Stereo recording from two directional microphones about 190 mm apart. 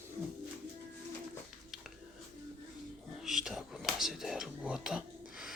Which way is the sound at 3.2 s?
Centre (ahead or behind).